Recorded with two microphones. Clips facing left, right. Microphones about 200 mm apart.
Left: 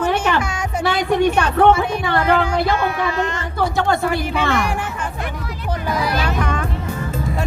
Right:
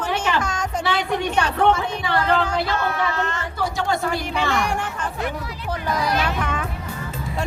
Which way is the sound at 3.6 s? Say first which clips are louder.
Left 5 dB; 60° left (ahead or behind).